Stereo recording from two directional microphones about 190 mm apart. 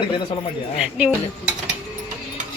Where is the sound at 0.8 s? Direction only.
5° right (ahead or behind).